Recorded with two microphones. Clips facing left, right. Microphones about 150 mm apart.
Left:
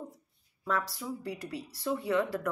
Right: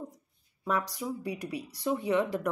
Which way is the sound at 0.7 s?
15° right (ahead or behind).